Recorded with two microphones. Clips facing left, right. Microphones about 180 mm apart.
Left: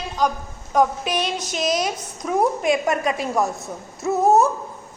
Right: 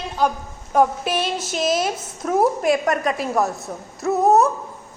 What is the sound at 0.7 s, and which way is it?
A woman's voice, 5° right (ahead or behind).